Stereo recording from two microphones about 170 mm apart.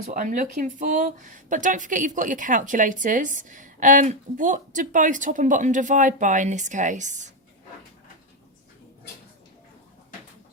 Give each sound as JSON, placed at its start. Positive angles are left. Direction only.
{"t": 0.0, "sound": "speech", "side_deg": -50}